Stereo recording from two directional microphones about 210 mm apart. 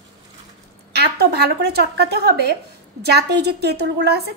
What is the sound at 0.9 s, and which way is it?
A woman's voice, 50° right (ahead or behind).